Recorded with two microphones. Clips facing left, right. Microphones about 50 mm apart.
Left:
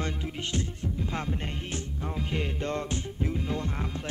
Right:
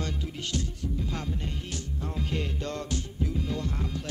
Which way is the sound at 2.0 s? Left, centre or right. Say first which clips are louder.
Even; left.